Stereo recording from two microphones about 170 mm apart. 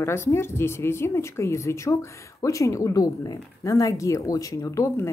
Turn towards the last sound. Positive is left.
turn(degrees=20)  # may be behind; listen again after turning